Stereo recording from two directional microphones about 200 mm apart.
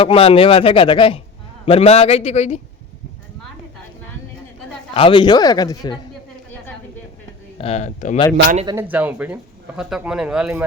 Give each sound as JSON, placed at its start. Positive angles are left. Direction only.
{"t": 0.0, "sound": "a man's voice", "side_deg": 30}
{"t": 4.9, "sound": "speech", "side_deg": 25}
{"t": 7.6, "sound": "a man's voice", "side_deg": 30}
{"t": 8.6, "sound": "speech", "side_deg": -10}